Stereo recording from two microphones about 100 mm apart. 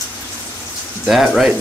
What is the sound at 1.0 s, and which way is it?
Speech, centre (ahead or behind).